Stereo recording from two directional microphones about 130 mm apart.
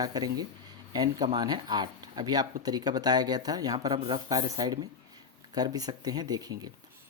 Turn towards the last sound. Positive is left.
turn(degrees=-30)  # may be behind; listen again after turning